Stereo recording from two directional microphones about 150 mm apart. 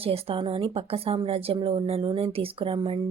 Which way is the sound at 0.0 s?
40° right (ahead or behind).